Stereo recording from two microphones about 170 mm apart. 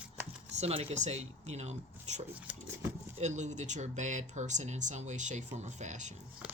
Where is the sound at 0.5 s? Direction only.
40° right (ahead or behind).